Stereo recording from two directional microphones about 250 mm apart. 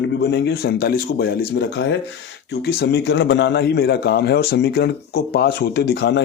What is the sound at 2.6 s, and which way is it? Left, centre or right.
Speech, left.